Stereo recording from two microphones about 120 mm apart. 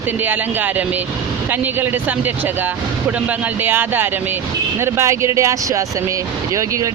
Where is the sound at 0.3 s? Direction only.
15° right (ahead or behind).